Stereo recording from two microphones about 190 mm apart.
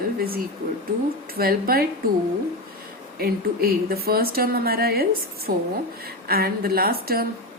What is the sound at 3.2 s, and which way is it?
Speech, 50° right (ahead or behind).